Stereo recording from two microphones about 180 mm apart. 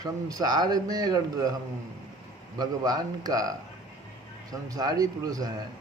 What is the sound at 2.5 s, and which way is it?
Speech, 20° right (ahead or behind).